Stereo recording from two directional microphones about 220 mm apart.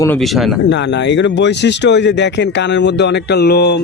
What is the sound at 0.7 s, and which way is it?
Speech, 55° left (ahead or behind).